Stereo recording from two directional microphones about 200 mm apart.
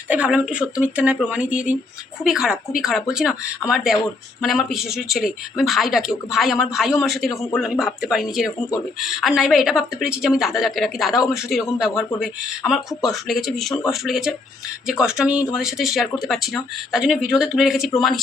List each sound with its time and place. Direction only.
0.1 s speech: 5° right (ahead or behind)
7.3 s a man's voice: 15° left (ahead or behind)
7.6 s speech: centre (ahead or behind)